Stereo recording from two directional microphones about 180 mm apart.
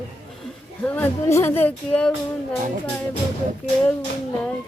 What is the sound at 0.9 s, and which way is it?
Speech, 10° left (ahead or behind).